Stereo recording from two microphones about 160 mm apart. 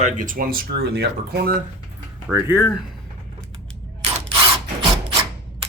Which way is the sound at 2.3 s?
10° right (ahead or behind).